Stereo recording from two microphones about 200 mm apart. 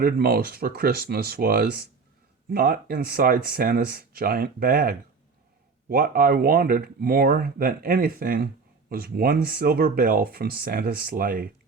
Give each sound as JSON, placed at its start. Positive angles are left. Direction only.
{"t": 0.0, "sound": "speech", "side_deg": -50}